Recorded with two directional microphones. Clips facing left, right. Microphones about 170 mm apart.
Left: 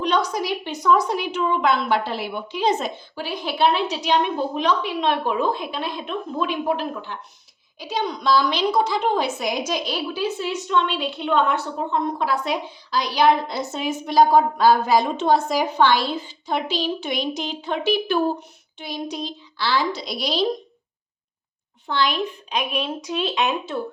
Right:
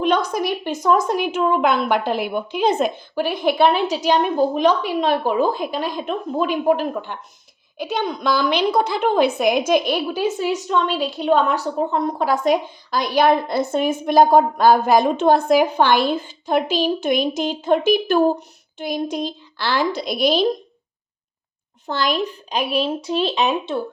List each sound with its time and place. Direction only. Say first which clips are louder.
0.0 s a woman's voice: right 3 dB; 50° right (ahead or behind)
21.8 s speech: right 2 dB; 45° right (ahead or behind)